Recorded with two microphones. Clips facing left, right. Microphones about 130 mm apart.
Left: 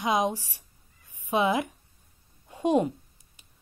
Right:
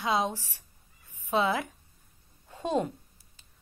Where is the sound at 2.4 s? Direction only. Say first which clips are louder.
Left 5 dB; 15° left (ahead or behind).